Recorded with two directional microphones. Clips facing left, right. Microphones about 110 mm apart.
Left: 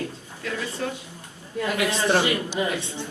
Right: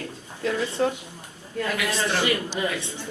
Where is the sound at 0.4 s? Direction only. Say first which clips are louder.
Right 5 dB; 25° right (ahead or behind).